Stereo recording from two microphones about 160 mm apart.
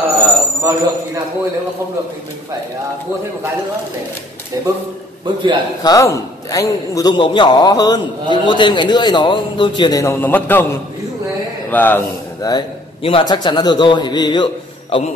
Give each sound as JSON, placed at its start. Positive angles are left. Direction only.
{"t": 0.6, "sound": "a man's voice", "side_deg": -15}
{"t": 4.6, "sound": "a man's voice", "side_deg": -20}
{"t": 5.8, "sound": "a man's voice", "side_deg": 20}
{"t": 11.7, "sound": "a man's voice", "side_deg": 10}
{"t": 12.4, "sound": "a man's voice", "side_deg": 20}